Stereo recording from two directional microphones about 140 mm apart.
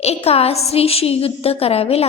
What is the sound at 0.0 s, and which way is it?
A woman's voice, 45° left (ahead or behind).